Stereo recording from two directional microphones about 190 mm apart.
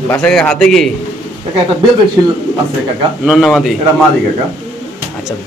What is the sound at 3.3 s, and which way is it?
Speech, centre (ahead or behind).